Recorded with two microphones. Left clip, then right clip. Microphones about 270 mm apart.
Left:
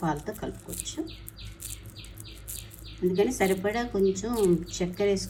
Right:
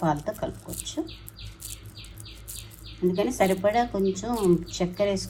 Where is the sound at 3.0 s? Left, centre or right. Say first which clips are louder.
Right 1 dB; centre.